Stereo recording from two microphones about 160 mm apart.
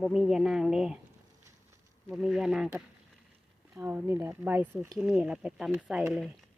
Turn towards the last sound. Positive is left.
turn(degrees=0)  # may be behind; listen again after turning